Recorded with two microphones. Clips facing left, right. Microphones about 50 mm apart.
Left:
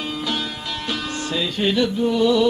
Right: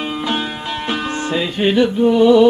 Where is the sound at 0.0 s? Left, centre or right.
Right.